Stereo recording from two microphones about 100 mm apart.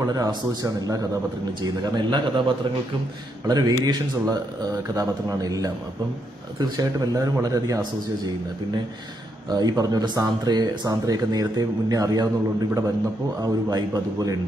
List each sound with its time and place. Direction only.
0.0 s speech: 40° right (ahead or behind)
1.6 s a man's voice: 50° right (ahead or behind)
3.4 s speech: 40° right (ahead or behind)
9.5 s speech: 40° right (ahead or behind)